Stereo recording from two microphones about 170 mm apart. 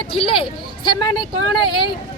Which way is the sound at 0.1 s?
30° left (ahead or behind).